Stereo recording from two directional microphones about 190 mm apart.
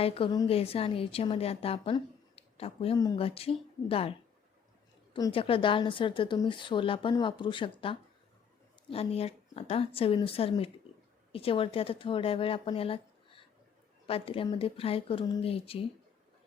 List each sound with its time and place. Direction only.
0.0 s a woman's voice: 30° left (ahead or behind)
5.1 s a woman's voice: 25° left (ahead or behind)